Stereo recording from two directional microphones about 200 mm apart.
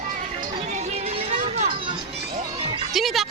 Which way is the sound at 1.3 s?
30° right (ahead or behind).